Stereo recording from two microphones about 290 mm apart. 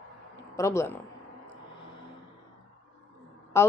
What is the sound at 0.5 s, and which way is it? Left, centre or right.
Speech, centre.